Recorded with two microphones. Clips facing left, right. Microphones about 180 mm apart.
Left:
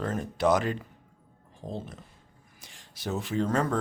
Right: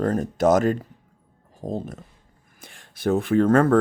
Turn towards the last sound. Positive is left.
turn(degrees=-55)  # may be behind; listen again after turning